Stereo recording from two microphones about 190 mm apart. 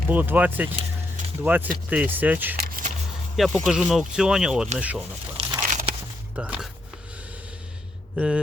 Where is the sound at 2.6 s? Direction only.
50° right (ahead or behind).